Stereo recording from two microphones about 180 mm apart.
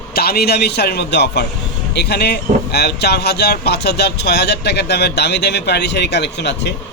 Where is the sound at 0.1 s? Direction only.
60° left (ahead or behind).